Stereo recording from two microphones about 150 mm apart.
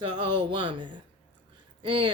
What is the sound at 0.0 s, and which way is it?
Speech, 35° right (ahead or behind).